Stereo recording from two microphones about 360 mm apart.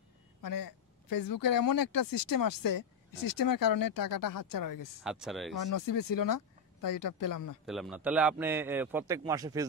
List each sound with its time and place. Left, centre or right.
0.4 s speech: left
5.0 s a man's voice: centre
5.6 s speech: left
7.6 s a man's voice: centre